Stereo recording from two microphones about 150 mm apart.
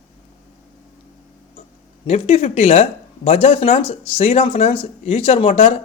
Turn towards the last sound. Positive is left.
turn(degrees=40)  # may be behind; listen again after turning